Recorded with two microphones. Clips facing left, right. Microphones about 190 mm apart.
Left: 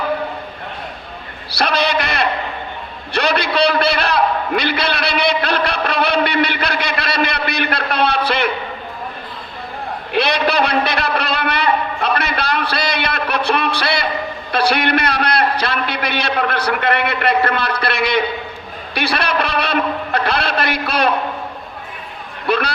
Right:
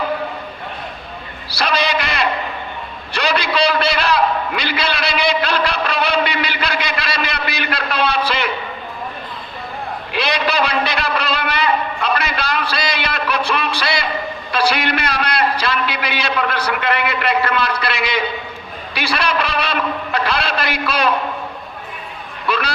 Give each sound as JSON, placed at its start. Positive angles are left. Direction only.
{"t": 1.5, "sound": "a sound", "side_deg": 55}
{"t": 10.1, "sound": "a man's voice", "side_deg": 55}
{"t": 22.4, "sound": "a man's voice", "side_deg": 55}